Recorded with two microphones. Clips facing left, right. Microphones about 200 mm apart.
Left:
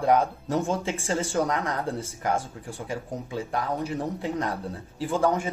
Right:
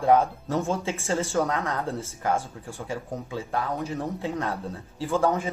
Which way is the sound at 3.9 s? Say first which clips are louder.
Left 1 dB; 15° left (ahead or behind).